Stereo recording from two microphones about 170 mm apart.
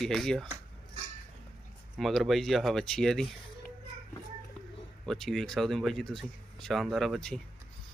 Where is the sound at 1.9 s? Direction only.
Centre (ahead or behind).